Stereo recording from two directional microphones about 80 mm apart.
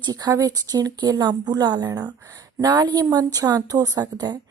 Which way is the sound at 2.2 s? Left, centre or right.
Right.